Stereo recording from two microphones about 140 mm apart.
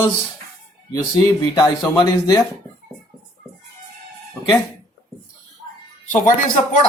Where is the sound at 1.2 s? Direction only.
25° left (ahead or behind).